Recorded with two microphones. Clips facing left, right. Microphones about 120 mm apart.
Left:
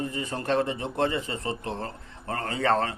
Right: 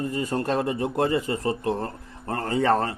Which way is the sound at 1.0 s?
40° right (ahead or behind).